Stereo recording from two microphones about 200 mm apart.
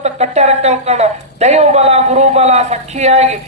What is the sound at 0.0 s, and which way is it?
A woman's voice, 35° right (ahead or behind).